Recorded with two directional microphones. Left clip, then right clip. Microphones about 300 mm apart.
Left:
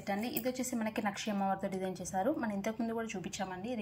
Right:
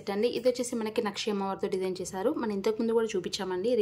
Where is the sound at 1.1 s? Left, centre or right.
Centre.